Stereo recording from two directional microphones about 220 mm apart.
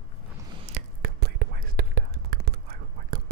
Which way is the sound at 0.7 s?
30° right (ahead or behind).